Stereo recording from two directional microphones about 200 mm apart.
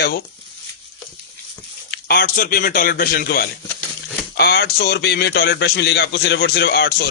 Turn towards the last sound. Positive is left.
turn(degrees=50)  # may be behind; listen again after turning